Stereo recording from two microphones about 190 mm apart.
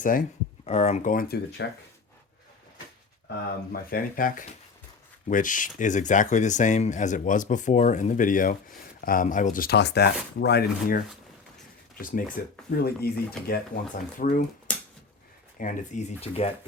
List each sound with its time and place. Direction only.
0.0 s speech: 45° left (ahead or behind)
3.2 s speech: 50° left (ahead or behind)
15.5 s speech: 45° left (ahead or behind)